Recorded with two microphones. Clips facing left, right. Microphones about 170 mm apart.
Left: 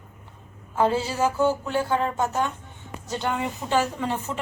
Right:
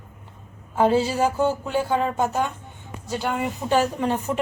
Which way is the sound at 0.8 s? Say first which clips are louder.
Right 3 dB; 15° right (ahead or behind).